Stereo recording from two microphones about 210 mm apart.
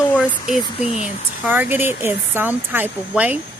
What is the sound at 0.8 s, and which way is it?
Speech, 35° left (ahead or behind).